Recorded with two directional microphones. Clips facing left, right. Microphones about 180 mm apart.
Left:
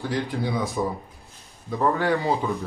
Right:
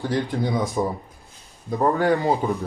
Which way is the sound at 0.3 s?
20° right (ahead or behind).